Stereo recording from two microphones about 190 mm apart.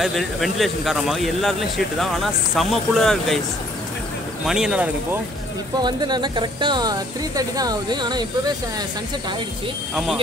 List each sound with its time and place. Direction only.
0.0 s speech: centre (ahead or behind)
4.5 s speech: 5° right (ahead or behind)
5.8 s speech: 20° right (ahead or behind)